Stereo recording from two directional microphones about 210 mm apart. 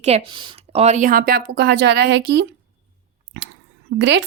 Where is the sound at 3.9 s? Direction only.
60° right (ahead or behind).